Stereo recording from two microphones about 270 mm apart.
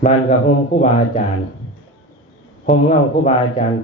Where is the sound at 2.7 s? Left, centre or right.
Left.